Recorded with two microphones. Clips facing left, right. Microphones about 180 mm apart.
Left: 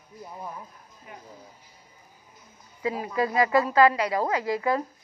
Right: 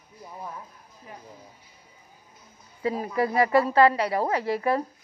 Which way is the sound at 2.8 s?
35° right (ahead or behind).